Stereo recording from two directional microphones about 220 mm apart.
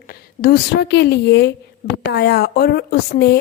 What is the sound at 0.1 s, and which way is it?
A woman's voice, 45° left (ahead or behind).